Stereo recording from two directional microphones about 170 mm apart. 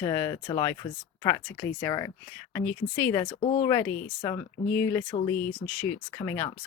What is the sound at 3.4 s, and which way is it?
Speech, 40° left (ahead or behind).